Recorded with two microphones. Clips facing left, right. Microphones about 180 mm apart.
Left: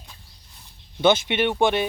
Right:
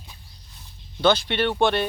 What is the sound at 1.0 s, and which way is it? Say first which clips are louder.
Speech: left 1 dB; 20° left (ahead or behind).